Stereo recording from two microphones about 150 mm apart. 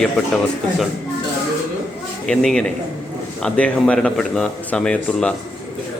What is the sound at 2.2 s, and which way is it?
Speech, 5° left (ahead or behind).